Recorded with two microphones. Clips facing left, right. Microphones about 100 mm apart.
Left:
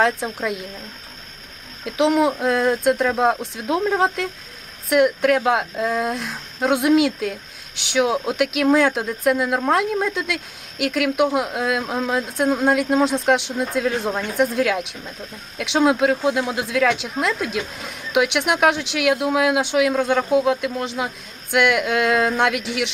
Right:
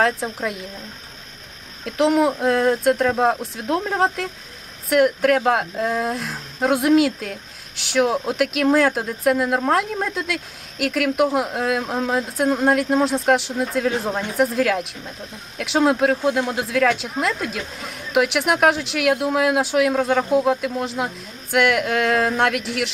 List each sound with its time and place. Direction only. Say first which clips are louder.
0.0 s speech: even; centre (ahead or behind)
1.8 s speech: even; centre (ahead or behind)